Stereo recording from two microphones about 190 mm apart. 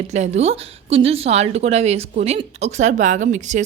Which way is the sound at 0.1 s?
35° right (ahead or behind).